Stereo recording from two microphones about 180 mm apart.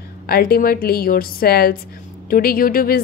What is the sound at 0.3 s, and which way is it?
A woman's voice, 55° left (ahead or behind).